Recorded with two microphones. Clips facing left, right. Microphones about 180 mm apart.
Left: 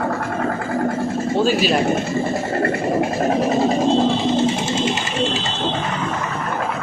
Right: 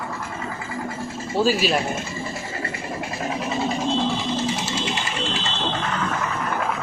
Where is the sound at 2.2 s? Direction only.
60° left (ahead or behind).